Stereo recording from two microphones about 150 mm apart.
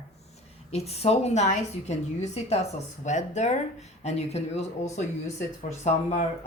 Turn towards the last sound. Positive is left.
turn(degrees=50)  # may be behind; listen again after turning